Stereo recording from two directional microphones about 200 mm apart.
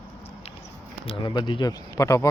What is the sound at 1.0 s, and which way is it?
Speech, 25° left (ahead or behind).